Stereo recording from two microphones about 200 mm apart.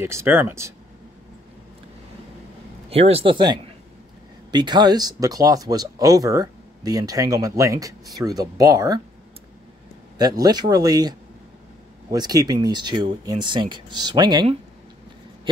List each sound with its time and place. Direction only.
0.0 s speech: 15° right (ahead or behind)
2.9 s speech: 30° right (ahead or behind)
10.1 s speech: 20° right (ahead or behind)